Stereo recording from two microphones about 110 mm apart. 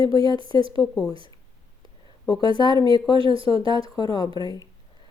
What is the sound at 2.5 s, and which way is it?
Speech, 40° left (ahead or behind).